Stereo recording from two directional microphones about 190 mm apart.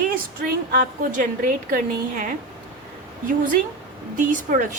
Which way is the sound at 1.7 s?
40° right (ahead or behind).